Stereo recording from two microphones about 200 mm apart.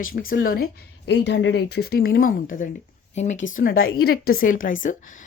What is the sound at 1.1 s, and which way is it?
Speech, 65° left (ahead or behind).